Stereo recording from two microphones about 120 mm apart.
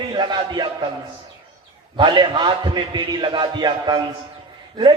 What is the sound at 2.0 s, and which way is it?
A man's voice, 40° right (ahead or behind).